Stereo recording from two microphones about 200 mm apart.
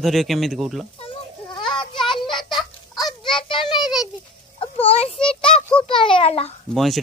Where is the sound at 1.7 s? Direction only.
25° left (ahead or behind).